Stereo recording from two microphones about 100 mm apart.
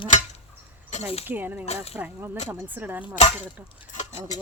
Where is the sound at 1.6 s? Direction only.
90° left.